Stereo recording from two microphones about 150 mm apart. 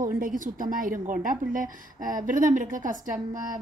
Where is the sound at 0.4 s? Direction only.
65° right (ahead or behind).